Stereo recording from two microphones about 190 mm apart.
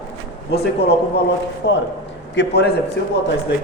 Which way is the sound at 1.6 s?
65° left (ahead or behind).